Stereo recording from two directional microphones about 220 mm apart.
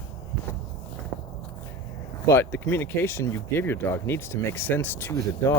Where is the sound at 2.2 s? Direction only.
10° left (ahead or behind).